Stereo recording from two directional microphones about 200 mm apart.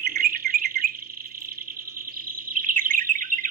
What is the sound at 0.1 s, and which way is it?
Bird, 50° right (ahead or behind).